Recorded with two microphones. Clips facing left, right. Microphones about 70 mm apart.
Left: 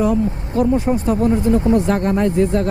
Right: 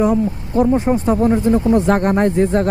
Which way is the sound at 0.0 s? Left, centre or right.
Right.